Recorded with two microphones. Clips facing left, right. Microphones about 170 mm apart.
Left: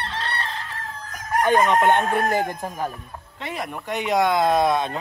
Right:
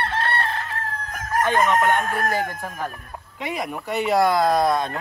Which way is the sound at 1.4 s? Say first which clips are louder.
Left 2 dB; 20° left (ahead or behind).